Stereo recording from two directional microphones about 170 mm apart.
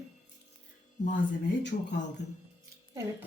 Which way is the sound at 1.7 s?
60° left (ahead or behind).